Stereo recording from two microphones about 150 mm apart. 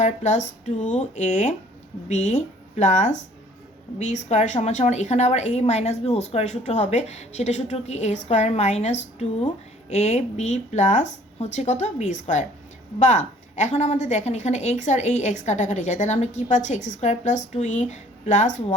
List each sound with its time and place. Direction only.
0.0 s a woman's voice: 50° left (ahead or behind)